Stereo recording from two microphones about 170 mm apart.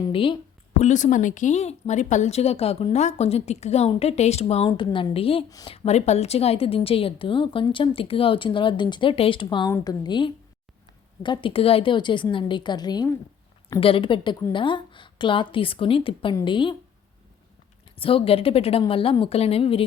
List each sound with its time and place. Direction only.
0.1 s a woman's voice: 30° left (ahead or behind)
0.8 s a woman's voice: 45° left (ahead or behind)
5.5 s a woman's voice: 20° left (ahead or behind)
5.7 s a woman's voice: 40° left (ahead or behind)
17.9 s a woman's voice: 35° left (ahead or behind)